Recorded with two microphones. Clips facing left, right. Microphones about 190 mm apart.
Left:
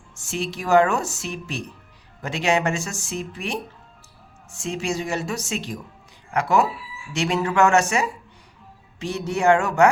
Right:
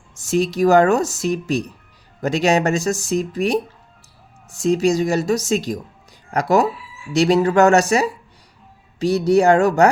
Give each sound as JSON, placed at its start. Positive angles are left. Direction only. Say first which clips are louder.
{"t": 0.1, "sound": "speech", "louder": "right 9 dB", "side_deg": -40}